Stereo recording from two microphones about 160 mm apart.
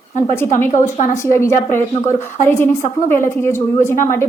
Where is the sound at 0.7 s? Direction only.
50° left (ahead or behind).